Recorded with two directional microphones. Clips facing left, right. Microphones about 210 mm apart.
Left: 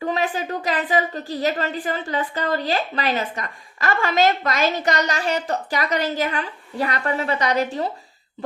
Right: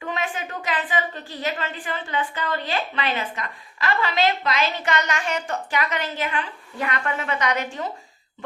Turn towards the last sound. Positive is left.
turn(degrees=35)  # may be behind; listen again after turning